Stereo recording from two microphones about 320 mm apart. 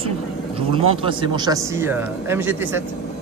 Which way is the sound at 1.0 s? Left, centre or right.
Centre.